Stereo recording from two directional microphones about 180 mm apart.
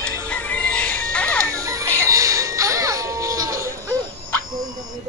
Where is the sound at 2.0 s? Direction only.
20° right (ahead or behind).